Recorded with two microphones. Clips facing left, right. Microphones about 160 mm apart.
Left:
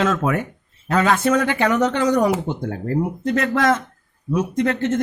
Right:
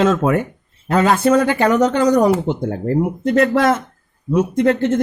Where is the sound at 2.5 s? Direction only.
30° right (ahead or behind).